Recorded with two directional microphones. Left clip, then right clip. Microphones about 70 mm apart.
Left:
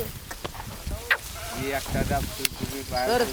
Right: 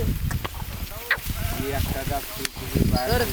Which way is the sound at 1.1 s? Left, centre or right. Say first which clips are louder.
Even; left.